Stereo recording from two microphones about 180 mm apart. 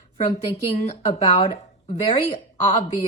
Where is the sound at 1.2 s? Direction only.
25° left (ahead or behind).